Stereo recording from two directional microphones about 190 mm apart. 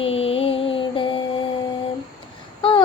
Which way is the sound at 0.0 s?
30° left (ahead or behind).